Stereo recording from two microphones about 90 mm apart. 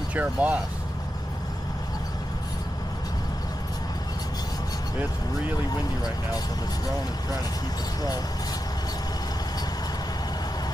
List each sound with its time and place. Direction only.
0.1 s speech: 15° right (ahead or behind)